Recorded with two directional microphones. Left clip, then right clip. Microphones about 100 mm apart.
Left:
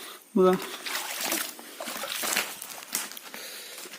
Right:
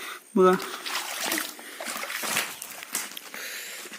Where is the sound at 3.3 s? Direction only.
20° left (ahead or behind).